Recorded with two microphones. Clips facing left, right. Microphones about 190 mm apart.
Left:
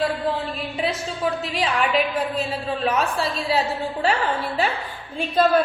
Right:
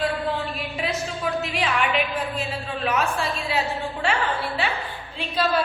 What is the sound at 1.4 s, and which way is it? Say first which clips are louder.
A woman's voice: left 1 dB; 35° left (ahead or behind).